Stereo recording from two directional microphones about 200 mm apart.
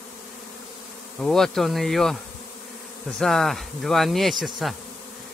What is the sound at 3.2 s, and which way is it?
Speech, centre (ahead or behind).